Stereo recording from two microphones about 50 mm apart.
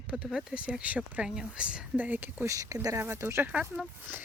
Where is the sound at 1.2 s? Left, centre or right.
Centre.